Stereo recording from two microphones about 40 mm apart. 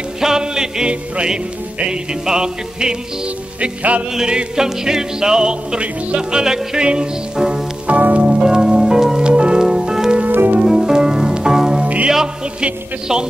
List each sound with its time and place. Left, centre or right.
0.2 s music: centre
3.6 s music: right
4.1 s music: centre
7.8 s music: right
8.3 s music: centre
10.3 s music: right
10.6 s music: centre
11.8 s music: right
13.1 s music: centre